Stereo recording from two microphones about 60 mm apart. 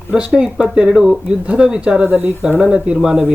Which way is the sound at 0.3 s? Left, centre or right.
Centre.